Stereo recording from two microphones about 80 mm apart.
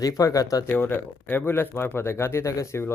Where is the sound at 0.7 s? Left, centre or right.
Left.